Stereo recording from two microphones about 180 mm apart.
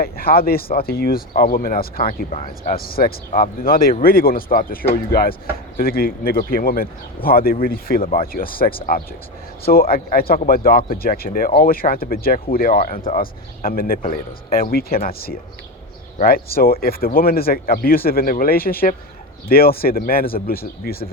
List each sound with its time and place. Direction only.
0.0 s speech: 55° left (ahead or behind)